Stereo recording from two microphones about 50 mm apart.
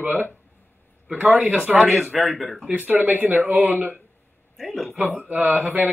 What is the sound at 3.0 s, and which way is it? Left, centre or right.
Speech, right.